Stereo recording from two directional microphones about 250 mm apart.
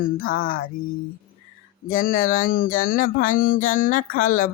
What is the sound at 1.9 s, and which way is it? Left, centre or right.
Speech, left.